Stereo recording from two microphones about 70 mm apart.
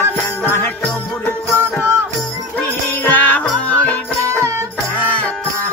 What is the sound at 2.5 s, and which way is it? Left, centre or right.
Music, left.